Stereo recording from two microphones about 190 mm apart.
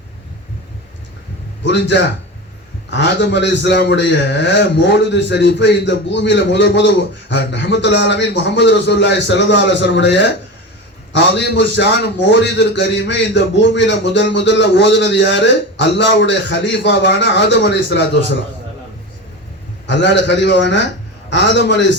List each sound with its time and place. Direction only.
1.6 s a man's voice: 70° left (ahead or behind)
19.9 s a man's voice: 70° left (ahead or behind)